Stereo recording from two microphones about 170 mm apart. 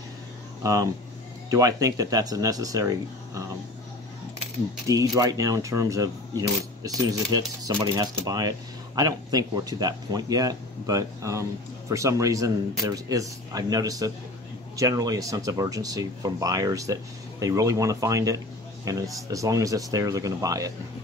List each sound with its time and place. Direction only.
1.5 s speech: 20° right (ahead or behind)
4.8 s speech: 20° right (ahead or behind)